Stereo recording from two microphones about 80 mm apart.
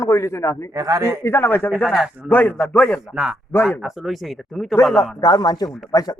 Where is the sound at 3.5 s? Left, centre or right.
Left.